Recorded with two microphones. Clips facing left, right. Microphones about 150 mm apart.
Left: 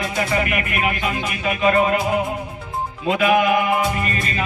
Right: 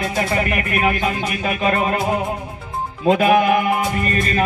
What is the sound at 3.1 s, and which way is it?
Music, 40° right (ahead or behind).